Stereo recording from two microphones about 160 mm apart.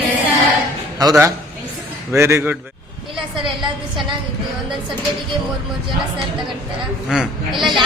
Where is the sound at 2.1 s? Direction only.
15° right (ahead or behind).